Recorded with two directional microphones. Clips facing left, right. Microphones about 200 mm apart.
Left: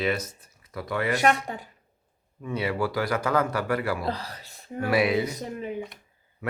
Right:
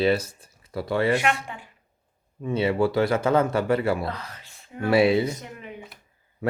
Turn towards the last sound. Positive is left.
turn(degrees=35)  # may be behind; listen again after turning